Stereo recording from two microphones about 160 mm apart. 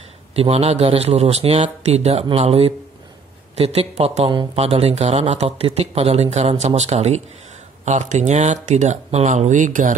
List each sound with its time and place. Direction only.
0.4 s speech: 40° right (ahead or behind)